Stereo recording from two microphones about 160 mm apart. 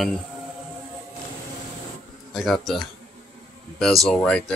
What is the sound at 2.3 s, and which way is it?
Speech, centre (ahead or behind).